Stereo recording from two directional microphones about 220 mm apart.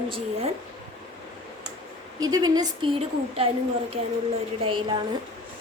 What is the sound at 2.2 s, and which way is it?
A woman's voice, 15° right (ahead or behind).